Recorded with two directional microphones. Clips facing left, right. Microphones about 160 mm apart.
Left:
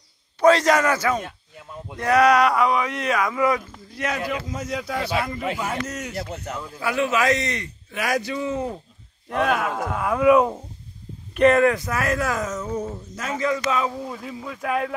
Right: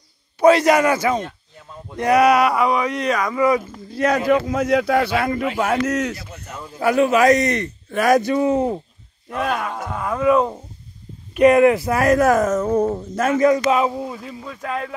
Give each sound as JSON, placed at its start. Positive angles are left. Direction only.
{"t": 0.4, "sound": "a man's voice", "side_deg": -10}
{"t": 1.2, "sound": "speech", "side_deg": 5}
{"t": 2.0, "sound": "speech", "side_deg": -10}
{"t": 3.9, "sound": "a man's voice", "side_deg": -35}
{"t": 4.3, "sound": "a man's voice", "side_deg": -60}
{"t": 6.8, "sound": "a man's voice", "side_deg": -40}
{"t": 8.5, "sound": "a man's voice", "side_deg": -30}
{"t": 9.3, "sound": "speech", "side_deg": 0}
{"t": 11.3, "sound": "a man's voice", "side_deg": -15}
{"t": 11.7, "sound": "speech", "side_deg": -30}
{"t": 13.4, "sound": "a man's voice", "side_deg": -40}
{"t": 14.1, "sound": "speech", "side_deg": 5}